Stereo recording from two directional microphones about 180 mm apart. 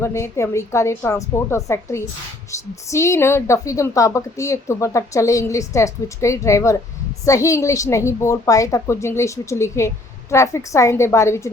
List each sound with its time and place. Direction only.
0.0 s a woman's voice: 15° left (ahead or behind)